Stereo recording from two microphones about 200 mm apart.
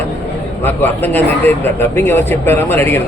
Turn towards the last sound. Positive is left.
turn(degrees=10)  # may be behind; listen again after turning